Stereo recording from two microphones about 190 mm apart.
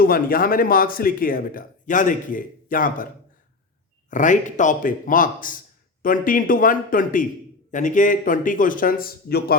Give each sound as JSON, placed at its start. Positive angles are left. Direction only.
{"t": 0.0, "sound": "speech", "side_deg": 50}
{"t": 4.1, "sound": "speech", "side_deg": 40}